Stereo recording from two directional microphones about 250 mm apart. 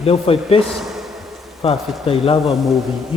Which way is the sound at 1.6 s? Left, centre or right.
Left.